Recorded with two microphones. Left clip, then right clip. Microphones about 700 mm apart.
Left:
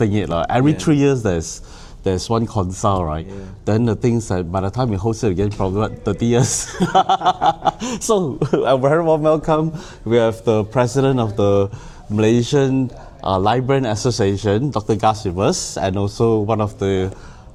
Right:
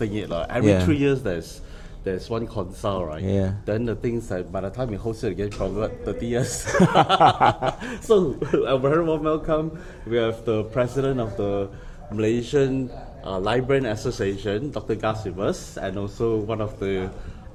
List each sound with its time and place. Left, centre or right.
0.0 s a man's voice: left
6.7 s speech: right
7.7 s a man's voice: left